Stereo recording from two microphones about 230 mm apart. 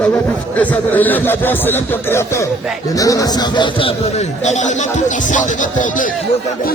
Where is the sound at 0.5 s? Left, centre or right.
Centre.